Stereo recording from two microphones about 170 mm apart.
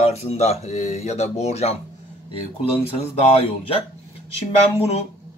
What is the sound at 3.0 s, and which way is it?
Speech, 35° left (ahead or behind).